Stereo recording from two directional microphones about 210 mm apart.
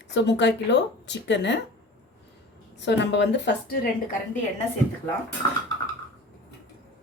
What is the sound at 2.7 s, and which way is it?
Speech, 60° left (ahead or behind).